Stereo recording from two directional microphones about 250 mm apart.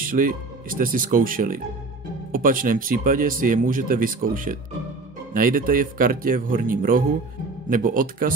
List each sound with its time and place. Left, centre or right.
0.0 s speech: right